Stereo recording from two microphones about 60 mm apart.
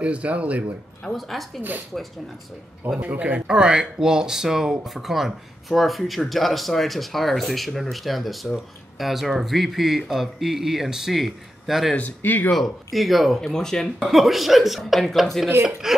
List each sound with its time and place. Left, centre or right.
0.0 s speech: right
1.0 s speech: centre
3.0 s speech: right; by 11.9 s centre
12.2 s speech: left
12.4 s speech: centre